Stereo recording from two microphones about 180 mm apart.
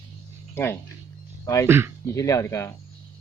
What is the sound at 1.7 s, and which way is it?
Speech, 15° right (ahead or behind).